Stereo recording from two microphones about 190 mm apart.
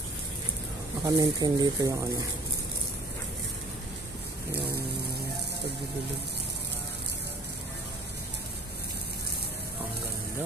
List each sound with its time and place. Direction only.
1.0 s speech: 20° right (ahead or behind)